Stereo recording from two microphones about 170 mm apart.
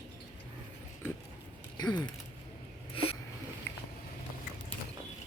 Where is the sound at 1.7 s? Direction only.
25° left (ahead or behind).